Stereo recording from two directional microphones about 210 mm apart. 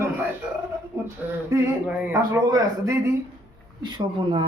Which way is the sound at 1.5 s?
15° right (ahead or behind).